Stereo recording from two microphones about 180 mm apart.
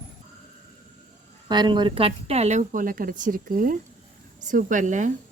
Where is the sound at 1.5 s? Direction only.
25° right (ahead or behind).